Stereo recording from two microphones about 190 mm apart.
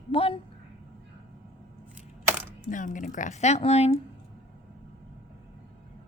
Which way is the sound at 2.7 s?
45° left (ahead or behind).